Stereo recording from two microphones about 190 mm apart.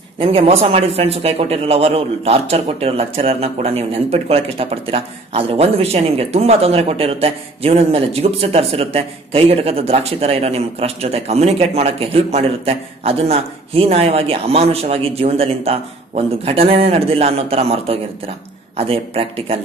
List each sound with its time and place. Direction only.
0.2 s a man's voice: 30° right (ahead or behind)